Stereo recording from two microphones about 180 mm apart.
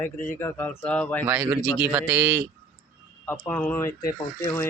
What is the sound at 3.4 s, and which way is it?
Speech, 10° left (ahead or behind).